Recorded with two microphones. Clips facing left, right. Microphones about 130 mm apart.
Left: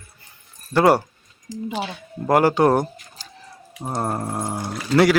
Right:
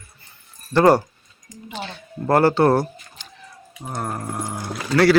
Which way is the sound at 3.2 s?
35° left (ahead or behind).